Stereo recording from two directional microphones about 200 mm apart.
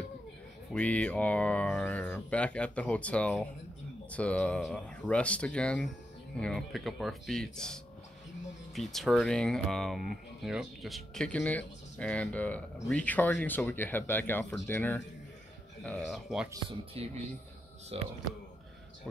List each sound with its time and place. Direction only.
0.7 s speech: 5° left (ahead or behind)
16.1 s speech: centre (ahead or behind)
17.0 s speech: 30° right (ahead or behind)